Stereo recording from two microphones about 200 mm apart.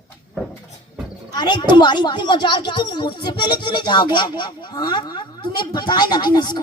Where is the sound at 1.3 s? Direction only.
20° left (ahead or behind).